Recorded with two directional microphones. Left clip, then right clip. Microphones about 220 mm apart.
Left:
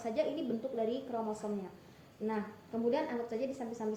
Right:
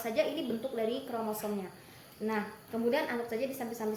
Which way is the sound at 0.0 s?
20° right (ahead or behind).